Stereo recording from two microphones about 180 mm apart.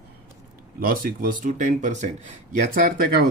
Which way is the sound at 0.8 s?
50° right (ahead or behind).